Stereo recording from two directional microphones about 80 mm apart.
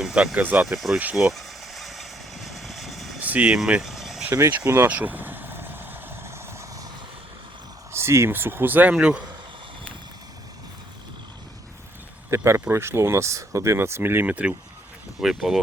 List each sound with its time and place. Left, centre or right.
0.0 s speech: centre
1.1 s vehicle: centre
3.2 s vehicle: centre
3.6 s vehicle: centre
4.7 s vehicle: right
7.9 s speech: right
9.0 s speech: centre
12.3 s speech: right; by 14.5 s centre
15.2 s speech: centre